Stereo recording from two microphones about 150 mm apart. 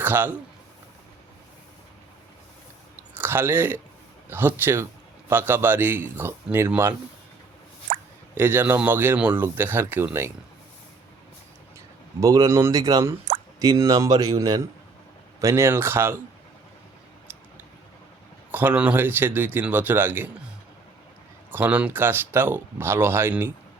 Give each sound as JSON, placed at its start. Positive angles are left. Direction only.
{"t": 0.0, "sound": "speech", "side_deg": -10}
{"t": 2.9, "sound": "chewing", "side_deg": -15}
{"t": 4.3, "sound": "speech", "side_deg": -15}
{"t": 7.9, "sound": "plop", "side_deg": -45}
{"t": 8.4, "sound": "speech", "side_deg": -15}
{"t": 12.2, "sound": "a man's voice", "side_deg": -25}
{"t": 18.5, "sound": "speech", "side_deg": -10}
{"t": 21.5, "sound": "speech", "side_deg": -10}